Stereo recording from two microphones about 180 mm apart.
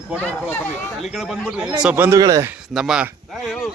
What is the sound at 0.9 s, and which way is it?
A man's voice, centre (ahead or behind).